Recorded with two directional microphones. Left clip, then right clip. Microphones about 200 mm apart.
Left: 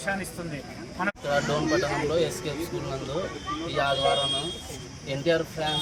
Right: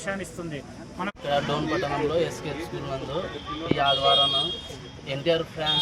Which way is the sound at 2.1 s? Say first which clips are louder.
Right 1 dB; 10° left (ahead or behind).